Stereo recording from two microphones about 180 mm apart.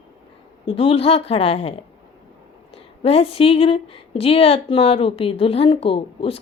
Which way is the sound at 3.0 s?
35° left (ahead or behind).